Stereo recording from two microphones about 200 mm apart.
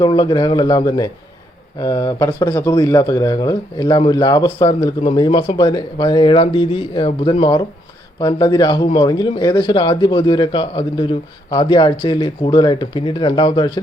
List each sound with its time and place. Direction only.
0.0 s speech: 20° left (ahead or behind)